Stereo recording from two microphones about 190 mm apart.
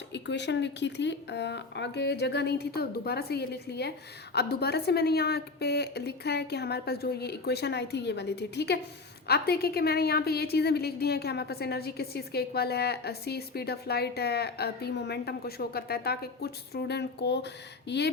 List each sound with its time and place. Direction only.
0.1 s a woman's voice: 65° left (ahead or behind)